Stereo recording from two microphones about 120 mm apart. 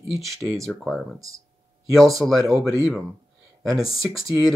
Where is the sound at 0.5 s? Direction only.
Centre (ahead or behind).